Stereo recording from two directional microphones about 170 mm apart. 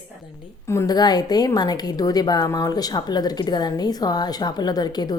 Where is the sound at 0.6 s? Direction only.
20° left (ahead or behind).